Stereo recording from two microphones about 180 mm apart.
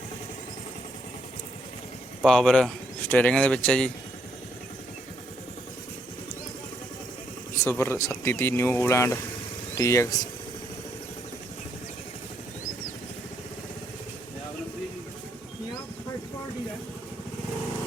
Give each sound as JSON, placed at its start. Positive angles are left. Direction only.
{"t": 2.2, "sound": "speech", "side_deg": 0}
{"t": 7.6, "sound": "speech", "side_deg": 15}